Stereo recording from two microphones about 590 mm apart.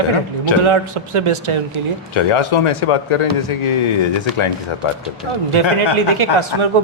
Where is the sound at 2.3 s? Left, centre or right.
Left.